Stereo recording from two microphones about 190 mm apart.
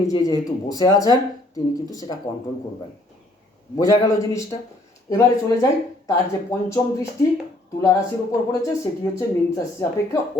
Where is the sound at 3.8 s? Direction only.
20° left (ahead or behind).